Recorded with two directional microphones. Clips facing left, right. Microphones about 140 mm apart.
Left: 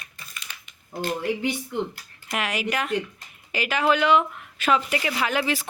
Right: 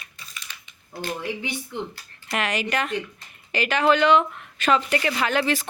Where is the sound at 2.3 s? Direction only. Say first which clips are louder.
Right 1 dB; 5° left (ahead or behind).